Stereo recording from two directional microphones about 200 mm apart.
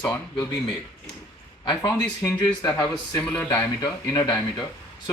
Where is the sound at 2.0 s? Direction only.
15° left (ahead or behind).